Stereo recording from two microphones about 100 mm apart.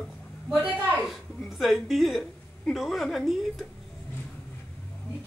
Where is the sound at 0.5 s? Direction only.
15° right (ahead or behind).